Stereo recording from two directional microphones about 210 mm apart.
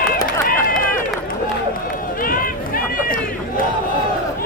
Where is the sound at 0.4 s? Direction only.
40° left (ahead or behind).